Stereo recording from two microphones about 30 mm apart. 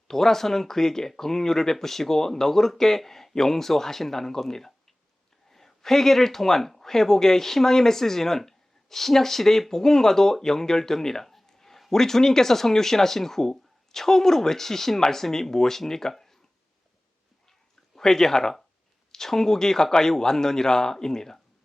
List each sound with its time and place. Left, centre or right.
0.1 s speech: centre
17.9 s speech: centre